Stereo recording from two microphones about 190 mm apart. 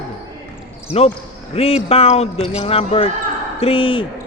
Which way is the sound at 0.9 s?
30° left (ahead or behind).